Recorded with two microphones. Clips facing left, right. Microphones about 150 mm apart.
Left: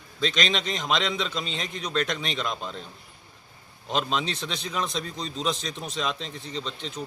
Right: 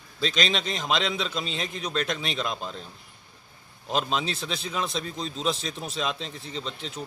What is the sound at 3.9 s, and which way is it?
Speech, 5° right (ahead or behind).